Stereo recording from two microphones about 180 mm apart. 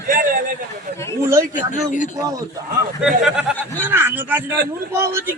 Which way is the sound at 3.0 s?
5° right (ahead or behind).